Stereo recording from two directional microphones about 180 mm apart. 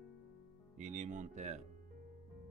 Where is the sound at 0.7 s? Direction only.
40° right (ahead or behind).